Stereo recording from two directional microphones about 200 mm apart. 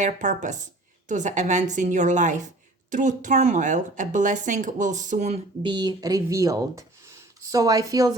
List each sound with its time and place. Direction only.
0.0 s speech: 40° right (ahead or behind)
5.6 s a woman's voice: 20° right (ahead or behind)